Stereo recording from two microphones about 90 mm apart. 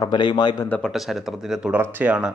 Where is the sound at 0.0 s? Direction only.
60° left (ahead or behind).